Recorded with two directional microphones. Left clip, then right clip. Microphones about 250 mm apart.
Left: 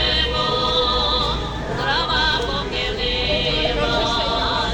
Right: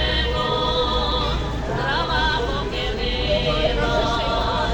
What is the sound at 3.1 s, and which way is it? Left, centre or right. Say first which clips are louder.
Music: even; centre.